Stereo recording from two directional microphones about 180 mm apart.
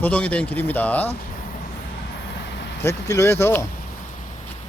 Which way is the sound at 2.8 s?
15° left (ahead or behind).